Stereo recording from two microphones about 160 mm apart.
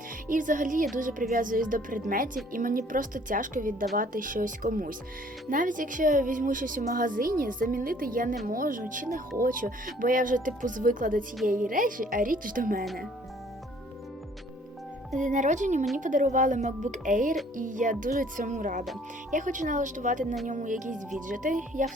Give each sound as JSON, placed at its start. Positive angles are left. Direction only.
{"t": 0.3, "sound": "a woman's voice", "side_deg": -55}
{"t": 15.1, "sound": "a woman's voice", "side_deg": -50}